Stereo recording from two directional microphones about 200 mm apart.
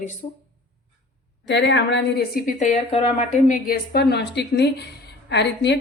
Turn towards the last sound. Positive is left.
turn(degrees=60)  # may be behind; listen again after turning